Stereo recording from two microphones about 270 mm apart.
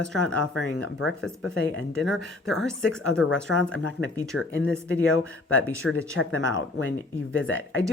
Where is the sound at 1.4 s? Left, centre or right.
Left.